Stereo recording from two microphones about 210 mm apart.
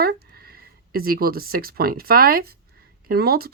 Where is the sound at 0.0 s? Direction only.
45° right (ahead or behind).